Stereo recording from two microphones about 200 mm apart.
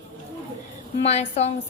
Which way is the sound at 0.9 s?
35° left (ahead or behind).